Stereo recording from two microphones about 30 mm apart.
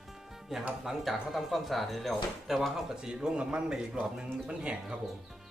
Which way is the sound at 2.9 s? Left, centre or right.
Right.